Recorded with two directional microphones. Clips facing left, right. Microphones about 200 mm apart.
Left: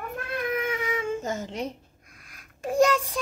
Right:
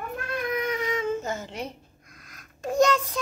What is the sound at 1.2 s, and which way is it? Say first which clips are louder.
Babbling: left 1 dB; 45° left (ahead or behind).